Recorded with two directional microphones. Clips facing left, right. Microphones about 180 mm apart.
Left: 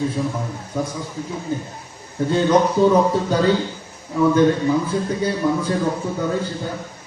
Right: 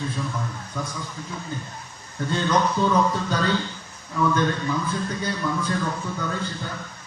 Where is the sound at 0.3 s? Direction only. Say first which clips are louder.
Left 5 dB; 30° left (ahead or behind).